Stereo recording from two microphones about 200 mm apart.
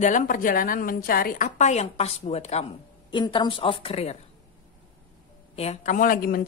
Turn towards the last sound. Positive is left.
turn(degrees=45)  # may be behind; listen again after turning